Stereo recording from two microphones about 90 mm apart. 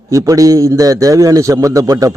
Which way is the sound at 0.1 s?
40° right (ahead or behind).